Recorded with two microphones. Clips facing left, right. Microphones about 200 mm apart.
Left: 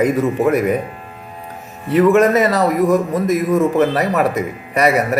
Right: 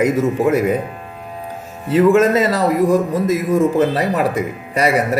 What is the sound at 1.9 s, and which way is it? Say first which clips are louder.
A man's voice: even; 30° right (ahead or behind).